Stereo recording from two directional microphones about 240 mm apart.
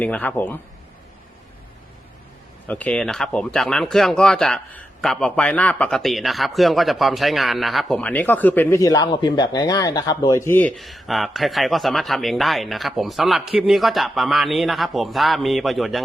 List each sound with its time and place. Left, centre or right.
0.0 s a man's voice: centre
2.6 s speech: centre